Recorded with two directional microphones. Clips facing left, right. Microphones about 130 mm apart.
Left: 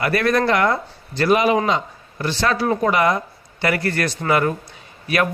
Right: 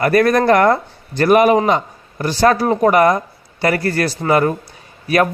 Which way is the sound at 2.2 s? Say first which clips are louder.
Right 6 dB; 40° right (ahead or behind).